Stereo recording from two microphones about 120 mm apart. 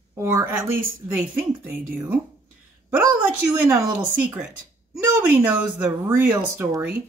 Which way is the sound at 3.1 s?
15° right (ahead or behind).